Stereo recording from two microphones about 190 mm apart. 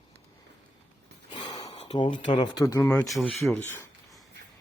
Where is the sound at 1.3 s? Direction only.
25° left (ahead or behind).